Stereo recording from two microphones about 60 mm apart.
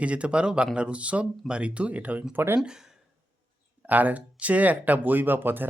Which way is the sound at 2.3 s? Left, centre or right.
Right.